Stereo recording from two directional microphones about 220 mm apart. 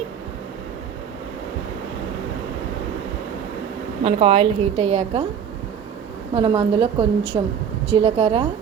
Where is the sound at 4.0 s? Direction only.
25° right (ahead or behind).